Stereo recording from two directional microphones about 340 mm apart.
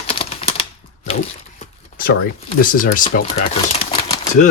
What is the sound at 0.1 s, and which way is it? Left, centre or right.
Typewriter, centre.